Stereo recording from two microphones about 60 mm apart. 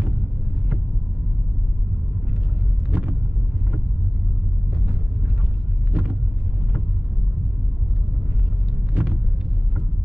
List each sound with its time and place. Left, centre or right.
2.9 s vehicle: right
5.9 s vehicle: centre
9.0 s vehicle: centre